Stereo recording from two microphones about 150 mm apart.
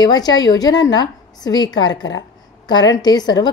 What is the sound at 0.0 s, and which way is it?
A woman's voice, 25° left (ahead or behind).